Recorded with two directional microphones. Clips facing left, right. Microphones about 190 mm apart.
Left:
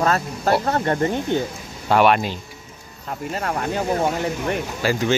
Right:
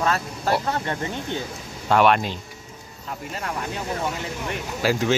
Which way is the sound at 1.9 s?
5° left (ahead or behind).